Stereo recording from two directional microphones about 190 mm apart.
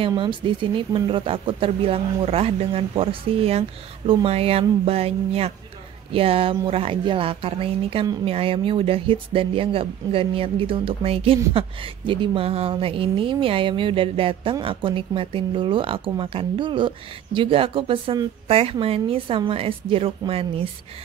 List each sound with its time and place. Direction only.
0.0 s speech: 25° right (ahead or behind)